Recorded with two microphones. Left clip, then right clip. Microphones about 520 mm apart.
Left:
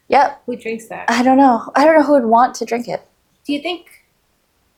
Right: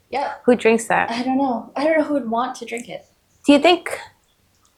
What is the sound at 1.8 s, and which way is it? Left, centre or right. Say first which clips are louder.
Speech: left 7 dB; left.